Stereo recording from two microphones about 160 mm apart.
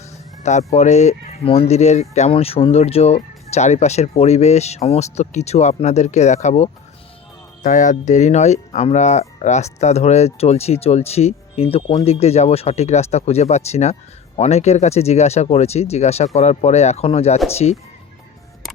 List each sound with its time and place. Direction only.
0.7 s speech: 45° left (ahead or behind)